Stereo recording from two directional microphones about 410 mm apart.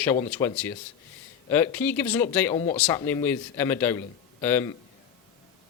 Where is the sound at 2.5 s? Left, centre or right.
Centre.